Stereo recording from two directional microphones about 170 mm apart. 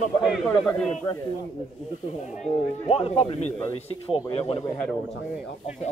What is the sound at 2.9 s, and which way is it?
Speech, 35° left (ahead or behind).